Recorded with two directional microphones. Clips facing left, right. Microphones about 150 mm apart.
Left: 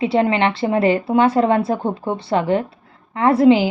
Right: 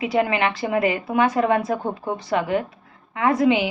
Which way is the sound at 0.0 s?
30° left (ahead or behind).